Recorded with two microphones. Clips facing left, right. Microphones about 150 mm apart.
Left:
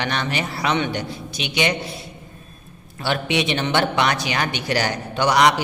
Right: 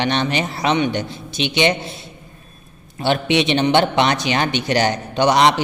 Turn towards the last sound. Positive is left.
turn(degrees=-25)  # may be behind; listen again after turning